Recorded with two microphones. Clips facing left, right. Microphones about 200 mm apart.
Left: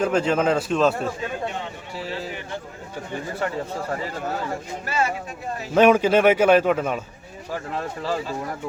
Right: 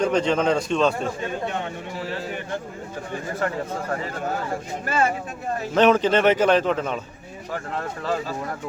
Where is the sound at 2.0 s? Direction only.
50° right (ahead or behind).